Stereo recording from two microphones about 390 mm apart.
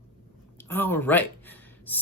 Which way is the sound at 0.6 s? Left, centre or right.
Centre.